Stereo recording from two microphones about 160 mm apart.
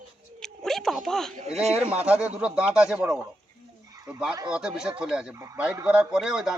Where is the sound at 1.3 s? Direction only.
40° right (ahead or behind).